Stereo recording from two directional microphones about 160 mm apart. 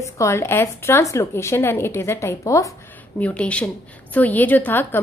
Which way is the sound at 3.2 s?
10° left (ahead or behind).